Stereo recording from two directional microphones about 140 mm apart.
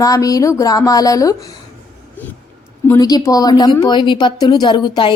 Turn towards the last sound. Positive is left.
turn(degrees=35)  # may be behind; listen again after turning